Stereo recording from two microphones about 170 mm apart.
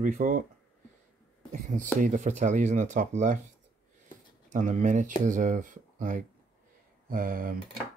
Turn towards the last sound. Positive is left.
turn(degrees=-55)  # may be behind; listen again after turning